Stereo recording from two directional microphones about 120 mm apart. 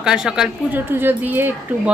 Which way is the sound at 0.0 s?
5° right (ahead or behind).